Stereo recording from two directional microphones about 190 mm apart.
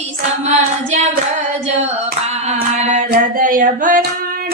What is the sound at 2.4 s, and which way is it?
Singing, 35° right (ahead or behind).